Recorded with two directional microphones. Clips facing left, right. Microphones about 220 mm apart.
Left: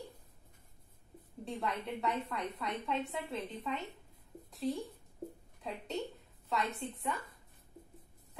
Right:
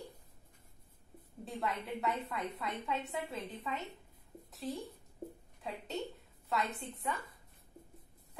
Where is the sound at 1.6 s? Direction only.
Centre (ahead or behind).